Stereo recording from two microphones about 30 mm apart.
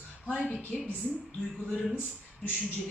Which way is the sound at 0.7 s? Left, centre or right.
Left.